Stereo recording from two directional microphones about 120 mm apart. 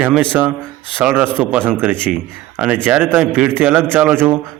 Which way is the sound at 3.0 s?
15° right (ahead or behind).